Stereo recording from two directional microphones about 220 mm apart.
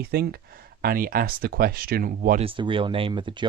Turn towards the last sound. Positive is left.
turn(degrees=-20)  # may be behind; listen again after turning